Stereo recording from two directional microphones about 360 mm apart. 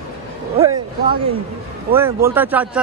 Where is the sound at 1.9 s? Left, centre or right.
Centre.